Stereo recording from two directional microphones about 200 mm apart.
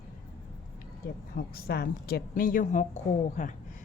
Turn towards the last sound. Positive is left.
turn(degrees=40)  # may be behind; listen again after turning